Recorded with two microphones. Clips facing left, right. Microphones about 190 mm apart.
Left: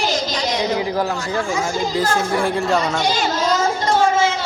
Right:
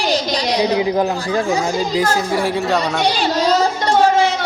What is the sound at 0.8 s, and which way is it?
A man's voice, 20° right (ahead or behind).